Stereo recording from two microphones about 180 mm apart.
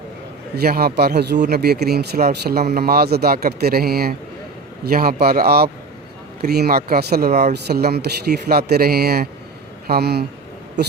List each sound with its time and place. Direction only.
0.5 s speech: 60° right (ahead or behind)